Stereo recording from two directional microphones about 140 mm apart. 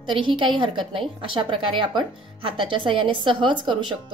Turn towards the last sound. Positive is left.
turn(degrees=-35)  # may be behind; listen again after turning